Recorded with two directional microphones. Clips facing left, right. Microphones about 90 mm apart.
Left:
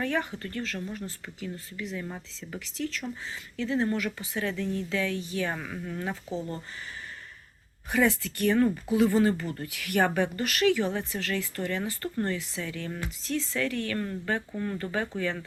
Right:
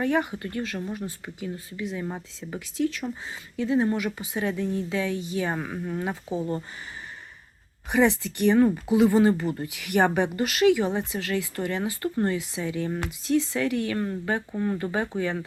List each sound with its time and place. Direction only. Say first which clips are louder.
0.0 s speech: right 5 dB; 15° right (ahead or behind)
7.9 s speech: right 4 dB; 20° right (ahead or behind)